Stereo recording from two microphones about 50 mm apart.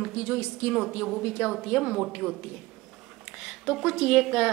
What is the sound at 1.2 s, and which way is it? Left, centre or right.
Speech, right.